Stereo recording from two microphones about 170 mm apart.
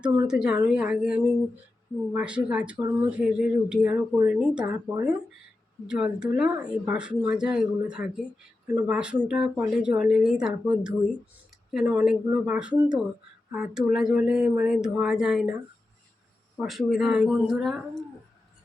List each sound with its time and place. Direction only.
0.0 s speech: 10° right (ahead or behind)
4.6 s speech: 20° right (ahead or behind)
5.8 s speech: 5° right (ahead or behind)
16.6 s speech: centre (ahead or behind)